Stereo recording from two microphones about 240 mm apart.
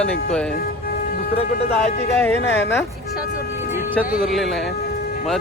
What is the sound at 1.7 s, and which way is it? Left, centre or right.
Speech, centre.